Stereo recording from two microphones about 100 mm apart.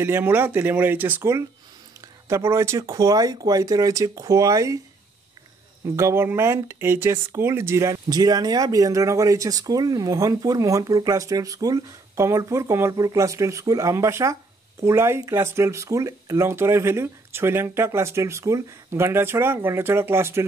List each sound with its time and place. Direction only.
0.0 s speech: 20° right (ahead or behind)
5.9 s speech: 25° right (ahead or behind)
8.1 s speech: 40° right (ahead or behind); by 20.4 s 25° right (ahead or behind)